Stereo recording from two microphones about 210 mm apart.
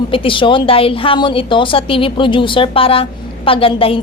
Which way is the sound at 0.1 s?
25° left (ahead or behind).